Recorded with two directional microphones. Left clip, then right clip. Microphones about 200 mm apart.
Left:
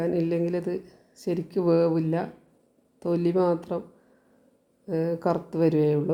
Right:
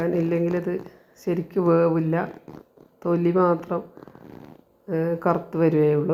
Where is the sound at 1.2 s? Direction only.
20° left (ahead or behind).